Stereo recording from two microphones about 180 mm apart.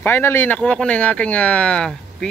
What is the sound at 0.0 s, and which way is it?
Speech, 10° left (ahead or behind).